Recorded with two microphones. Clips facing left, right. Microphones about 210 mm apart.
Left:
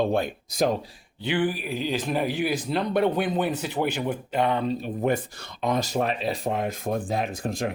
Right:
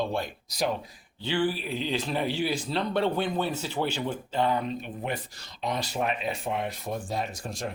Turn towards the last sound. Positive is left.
turn(degrees=60)  # may be behind; listen again after turning